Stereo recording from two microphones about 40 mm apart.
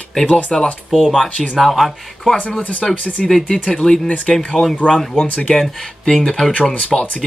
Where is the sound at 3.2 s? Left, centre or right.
Centre.